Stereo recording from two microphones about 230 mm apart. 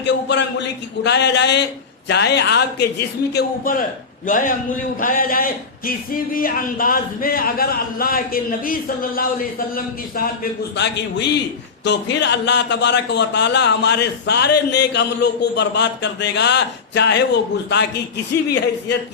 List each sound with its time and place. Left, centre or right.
0.0 s a man's voice: left